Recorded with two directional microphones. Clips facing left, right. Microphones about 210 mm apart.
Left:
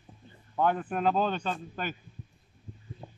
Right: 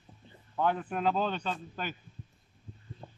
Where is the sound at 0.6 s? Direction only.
50° left (ahead or behind).